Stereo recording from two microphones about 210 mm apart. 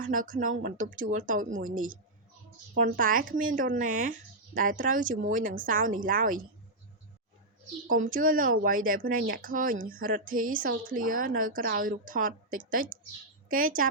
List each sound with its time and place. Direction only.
0.0 s speech: 40° right (ahead or behind)
8.1 s speech: 40° right (ahead or behind)